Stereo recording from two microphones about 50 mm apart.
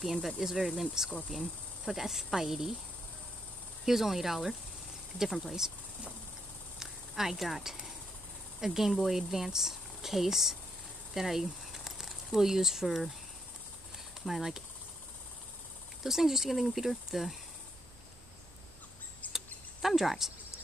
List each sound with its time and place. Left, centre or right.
0.0 s speech: centre
3.8 s speech: centre
6.8 s a sound: centre
8.5 s speech: centre
14.2 s speech: centre
16.0 s speech: centre
19.2 s a sound: left
19.9 s speech: centre